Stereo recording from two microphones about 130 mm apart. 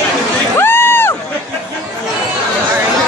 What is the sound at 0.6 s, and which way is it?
Crowd, 15° left (ahead or behind).